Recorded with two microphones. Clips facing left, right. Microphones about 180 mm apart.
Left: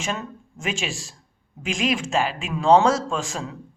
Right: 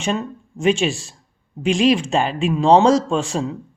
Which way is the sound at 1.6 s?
30° right (ahead or behind).